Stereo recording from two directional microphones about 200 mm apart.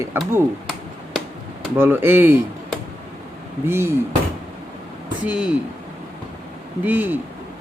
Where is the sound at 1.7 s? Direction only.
10° right (ahead or behind).